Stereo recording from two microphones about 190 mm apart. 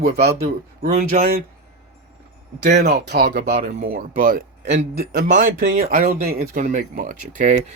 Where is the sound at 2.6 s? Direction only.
60° right (ahead or behind).